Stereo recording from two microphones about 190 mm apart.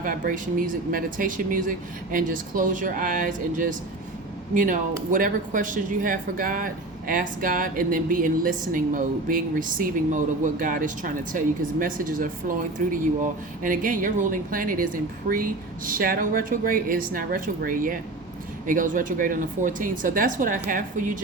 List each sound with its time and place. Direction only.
0.0 s speech: 45° right (ahead or behind)